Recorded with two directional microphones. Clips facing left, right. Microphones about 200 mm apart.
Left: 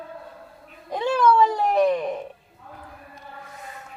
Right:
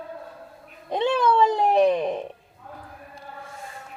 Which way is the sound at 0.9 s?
25° right (ahead or behind).